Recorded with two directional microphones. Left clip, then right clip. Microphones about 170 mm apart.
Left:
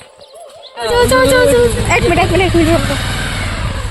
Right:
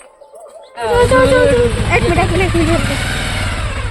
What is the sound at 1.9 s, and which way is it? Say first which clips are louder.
Speech: left 2 dB; 25° left (ahead or behind).